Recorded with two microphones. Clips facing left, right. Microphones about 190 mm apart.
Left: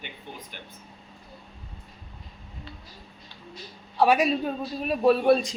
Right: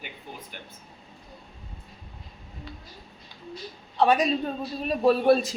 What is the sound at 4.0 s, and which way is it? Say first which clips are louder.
A woman's voice: left 1 dB; 10° left (ahead or behind).